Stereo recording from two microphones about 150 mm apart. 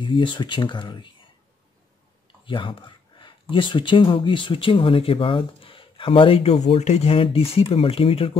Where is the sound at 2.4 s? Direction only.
35° left (ahead or behind).